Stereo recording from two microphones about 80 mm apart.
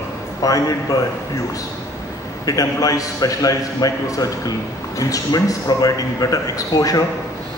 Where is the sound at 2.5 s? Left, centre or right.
Left.